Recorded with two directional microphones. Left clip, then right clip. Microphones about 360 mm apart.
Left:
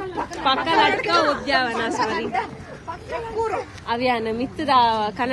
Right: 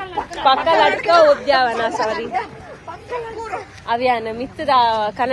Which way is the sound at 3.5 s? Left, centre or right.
Centre.